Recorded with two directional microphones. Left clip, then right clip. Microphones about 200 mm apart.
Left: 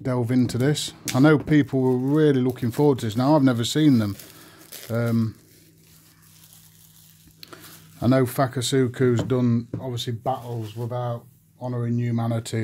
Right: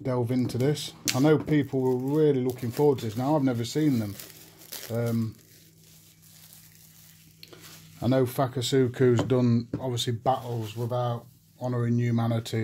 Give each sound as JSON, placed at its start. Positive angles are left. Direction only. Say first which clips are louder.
{"t": 0.0, "sound": "speech", "louder": "left 4 dB", "side_deg": 20}
{"t": 7.3, "sound": "speech", "louder": "left 4 dB", "side_deg": 30}